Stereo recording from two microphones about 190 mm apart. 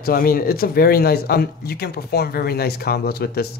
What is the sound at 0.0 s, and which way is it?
Speech, 50° left (ahead or behind).